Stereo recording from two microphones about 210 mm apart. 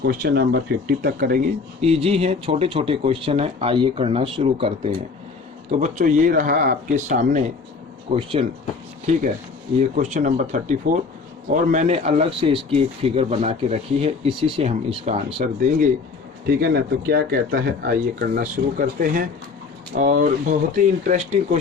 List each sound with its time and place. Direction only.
0.0 s speech: 45° right (ahead or behind)
1.8 s speech: 30° right (ahead or behind)
9.9 s speech: 35° right (ahead or behind)
16.5 s speech: 50° right (ahead or behind)